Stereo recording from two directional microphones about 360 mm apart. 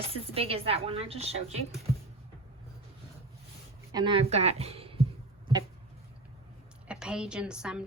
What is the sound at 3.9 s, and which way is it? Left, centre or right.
Speech, centre.